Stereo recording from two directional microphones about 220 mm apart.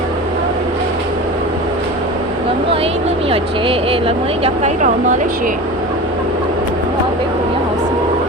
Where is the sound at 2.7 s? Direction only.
25° right (ahead or behind).